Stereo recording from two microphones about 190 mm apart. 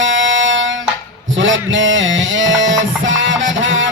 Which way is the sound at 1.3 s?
80° right.